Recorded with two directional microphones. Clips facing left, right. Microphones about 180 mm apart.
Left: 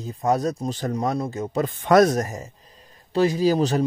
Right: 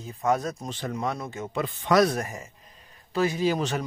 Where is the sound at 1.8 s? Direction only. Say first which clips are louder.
Left 5 dB; 50° left (ahead or behind).